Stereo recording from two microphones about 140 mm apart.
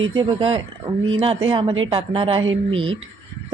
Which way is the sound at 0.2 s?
35° right (ahead or behind).